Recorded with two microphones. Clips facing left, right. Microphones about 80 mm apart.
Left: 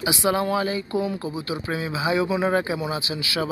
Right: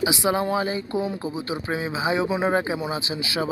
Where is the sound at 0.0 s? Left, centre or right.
Centre.